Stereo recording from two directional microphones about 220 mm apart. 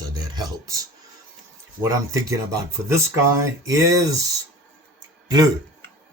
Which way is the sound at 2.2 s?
15° right (ahead or behind).